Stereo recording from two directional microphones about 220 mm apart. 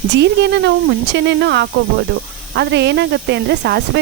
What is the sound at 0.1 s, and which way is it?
Speech, 50° right (ahead or behind).